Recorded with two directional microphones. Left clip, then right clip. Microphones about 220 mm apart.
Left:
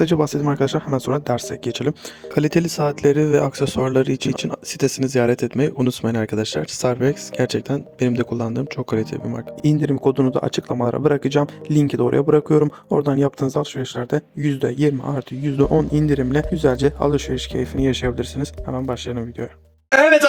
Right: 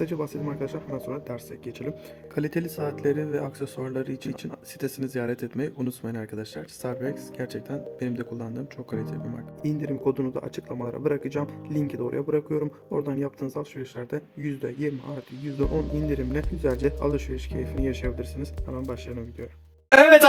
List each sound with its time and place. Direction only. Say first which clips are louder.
0.0 s speech: left 11 dB; 40° left (ahead or behind)